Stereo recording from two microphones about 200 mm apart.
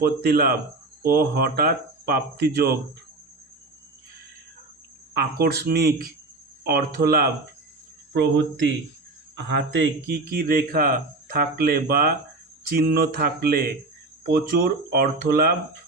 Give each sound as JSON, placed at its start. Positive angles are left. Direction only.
{"t": 0.0, "sound": "speech", "side_deg": -50}
{"t": 5.1, "sound": "speech", "side_deg": -55}
{"t": 9.3, "sound": "speech", "side_deg": -60}
{"t": 10.3, "sound": "speech", "side_deg": -45}